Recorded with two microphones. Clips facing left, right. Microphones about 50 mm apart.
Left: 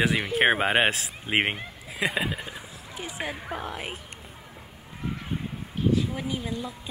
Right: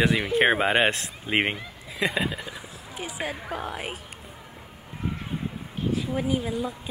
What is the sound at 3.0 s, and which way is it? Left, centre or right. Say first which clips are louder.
Speech: right 1 dB; centre.